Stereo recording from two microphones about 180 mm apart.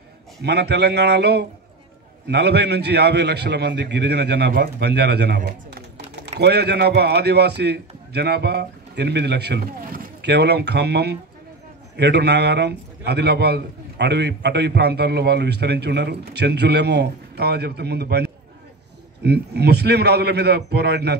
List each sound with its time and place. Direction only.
0.4 s a man's voice: 65° right (ahead or behind)